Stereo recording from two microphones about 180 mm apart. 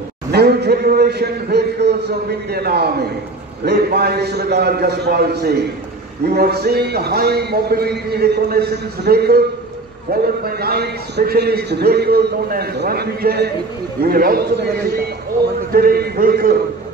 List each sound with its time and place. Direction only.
0.3 s a man's voice: 65° right (ahead or behind)